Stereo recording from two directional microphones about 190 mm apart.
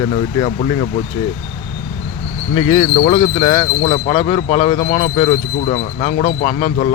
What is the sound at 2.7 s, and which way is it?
Speech, 35° left (ahead or behind).